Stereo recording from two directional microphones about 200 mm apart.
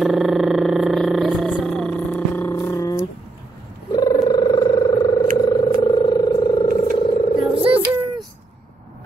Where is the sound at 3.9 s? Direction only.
20° left (ahead or behind).